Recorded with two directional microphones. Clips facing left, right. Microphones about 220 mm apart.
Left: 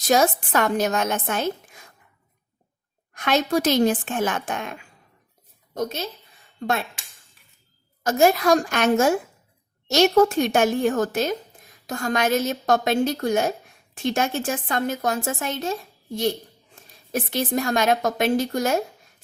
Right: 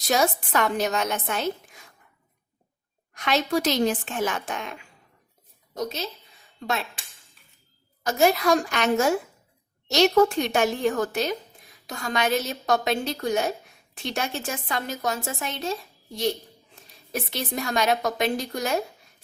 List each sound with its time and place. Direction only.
0.1 s a woman's voice: 45° left (ahead or behind)
3.2 s a woman's voice: 50° left (ahead or behind)
8.0 s a woman's voice: 45° left (ahead or behind)